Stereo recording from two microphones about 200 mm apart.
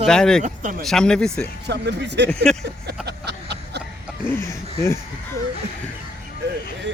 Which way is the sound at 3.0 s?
55° right (ahead or behind).